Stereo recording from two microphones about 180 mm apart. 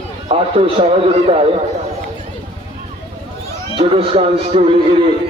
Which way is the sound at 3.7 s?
30° right (ahead or behind).